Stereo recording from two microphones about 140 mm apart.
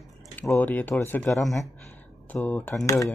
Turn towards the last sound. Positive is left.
turn(degrees=25)  # may be behind; listen again after turning